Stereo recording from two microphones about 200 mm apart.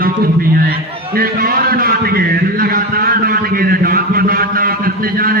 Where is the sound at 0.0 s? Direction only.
45° right (ahead or behind).